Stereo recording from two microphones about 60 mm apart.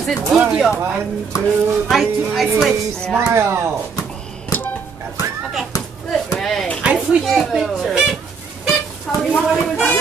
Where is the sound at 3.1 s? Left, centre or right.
Right.